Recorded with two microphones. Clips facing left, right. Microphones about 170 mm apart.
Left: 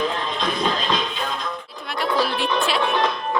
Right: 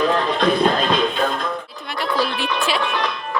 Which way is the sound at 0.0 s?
70° right (ahead or behind).